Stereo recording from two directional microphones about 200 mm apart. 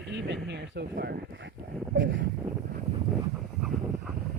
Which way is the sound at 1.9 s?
70° right (ahead or behind).